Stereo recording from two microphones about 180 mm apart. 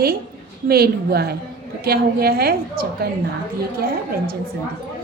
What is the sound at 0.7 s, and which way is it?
A woman's voice, 60° right (ahead or behind).